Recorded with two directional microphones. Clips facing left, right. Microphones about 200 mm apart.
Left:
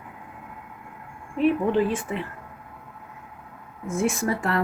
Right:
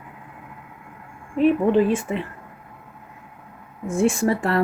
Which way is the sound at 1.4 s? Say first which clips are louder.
Right 4 dB; 20° right (ahead or behind).